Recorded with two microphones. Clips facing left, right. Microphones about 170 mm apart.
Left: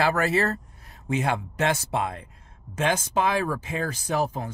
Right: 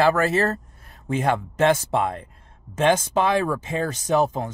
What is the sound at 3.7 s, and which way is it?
Speech, 25° right (ahead or behind).